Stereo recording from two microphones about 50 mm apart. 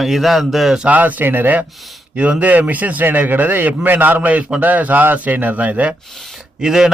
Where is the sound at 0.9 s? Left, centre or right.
Right.